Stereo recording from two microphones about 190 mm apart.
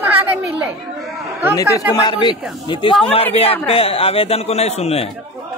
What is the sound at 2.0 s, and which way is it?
A man's voice, 25° left (ahead or behind).